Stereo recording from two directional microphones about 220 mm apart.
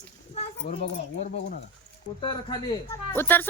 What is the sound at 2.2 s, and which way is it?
A child's voice, 20° left (ahead or behind).